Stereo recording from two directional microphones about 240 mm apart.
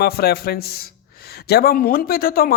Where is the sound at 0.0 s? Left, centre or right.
Left.